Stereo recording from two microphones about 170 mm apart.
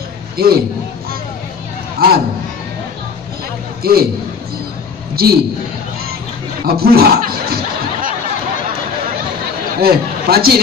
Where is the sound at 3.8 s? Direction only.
65° right (ahead or behind).